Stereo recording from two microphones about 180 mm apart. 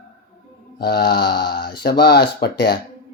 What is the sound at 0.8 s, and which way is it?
Speech, 60° left (ahead or behind).